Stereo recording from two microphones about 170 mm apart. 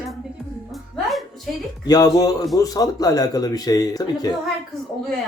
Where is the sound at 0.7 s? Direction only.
Centre (ahead or behind).